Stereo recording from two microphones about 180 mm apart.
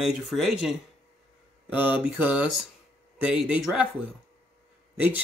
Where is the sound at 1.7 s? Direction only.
10° right (ahead or behind).